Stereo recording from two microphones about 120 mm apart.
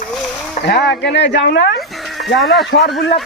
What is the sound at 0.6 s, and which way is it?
Speech, 90° left.